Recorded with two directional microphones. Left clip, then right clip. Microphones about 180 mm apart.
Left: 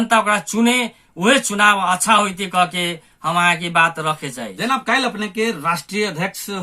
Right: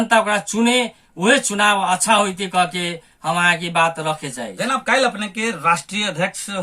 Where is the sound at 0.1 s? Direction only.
10° left (ahead or behind).